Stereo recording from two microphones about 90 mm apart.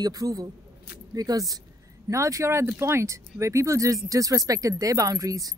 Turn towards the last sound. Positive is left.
turn(degrees=-40)  # may be behind; listen again after turning